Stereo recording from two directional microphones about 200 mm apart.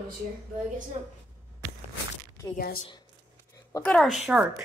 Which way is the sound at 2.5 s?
45° left (ahead or behind).